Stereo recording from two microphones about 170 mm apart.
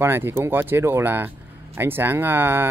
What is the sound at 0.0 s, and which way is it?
Speech, 15° right (ahead or behind).